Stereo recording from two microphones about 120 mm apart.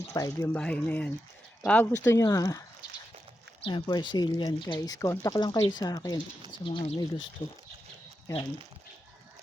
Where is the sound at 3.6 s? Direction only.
40° left (ahead or behind).